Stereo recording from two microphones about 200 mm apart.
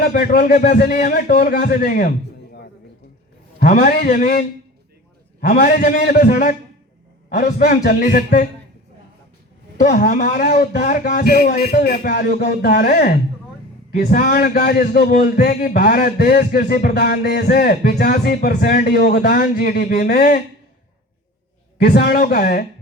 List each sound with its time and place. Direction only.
0.0 s a man's voice: 45° left (ahead or behind)
3.6 s a man's voice: 45° left (ahead or behind)
5.5 s a man's voice: 45° left (ahead or behind)
9.8 s a man's voice: 45° left (ahead or behind)
21.8 s a man's voice: 50° left (ahead or behind)